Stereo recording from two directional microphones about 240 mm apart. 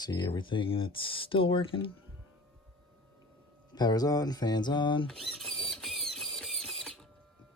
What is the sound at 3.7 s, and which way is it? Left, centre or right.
Speech, centre.